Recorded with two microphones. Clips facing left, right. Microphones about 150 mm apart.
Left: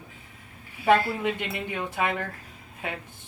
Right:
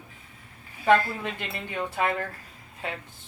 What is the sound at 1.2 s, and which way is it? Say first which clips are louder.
Speech: left 5 dB; 15° left (ahead or behind).